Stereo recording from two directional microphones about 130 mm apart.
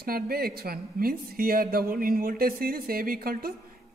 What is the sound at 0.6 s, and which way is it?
Speech, 90° right.